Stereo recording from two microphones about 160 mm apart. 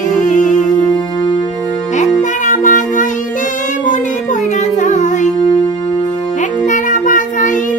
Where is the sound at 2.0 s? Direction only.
50° left (ahead or behind).